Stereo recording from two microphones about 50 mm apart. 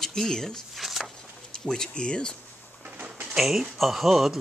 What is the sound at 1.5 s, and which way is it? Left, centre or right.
Speech, centre.